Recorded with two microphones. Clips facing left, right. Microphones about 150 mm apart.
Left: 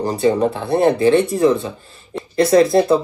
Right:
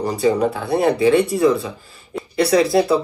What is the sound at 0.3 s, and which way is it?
Speech, 25° left (ahead or behind).